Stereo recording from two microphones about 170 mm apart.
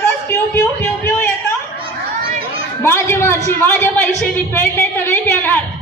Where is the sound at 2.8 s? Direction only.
15° left (ahead or behind).